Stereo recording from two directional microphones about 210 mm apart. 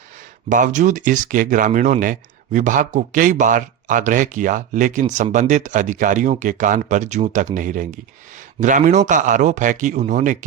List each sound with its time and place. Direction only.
0.4 s speech: 40° right (ahead or behind)